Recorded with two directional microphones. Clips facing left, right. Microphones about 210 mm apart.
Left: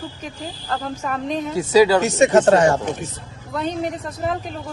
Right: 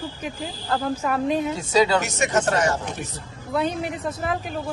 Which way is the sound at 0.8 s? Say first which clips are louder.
Right 4 dB; 5° right (ahead or behind).